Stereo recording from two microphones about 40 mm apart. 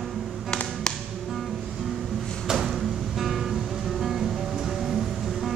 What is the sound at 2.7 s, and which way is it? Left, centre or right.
Music, centre.